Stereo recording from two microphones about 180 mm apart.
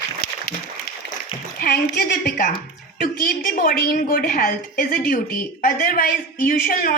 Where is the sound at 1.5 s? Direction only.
55° left (ahead or behind).